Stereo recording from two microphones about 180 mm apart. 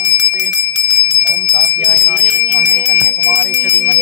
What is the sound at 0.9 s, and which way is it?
Bell, 70° right (ahead or behind).